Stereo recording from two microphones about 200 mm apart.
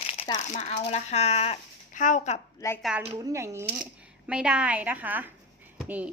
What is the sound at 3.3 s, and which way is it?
Speech, 15° right (ahead or behind).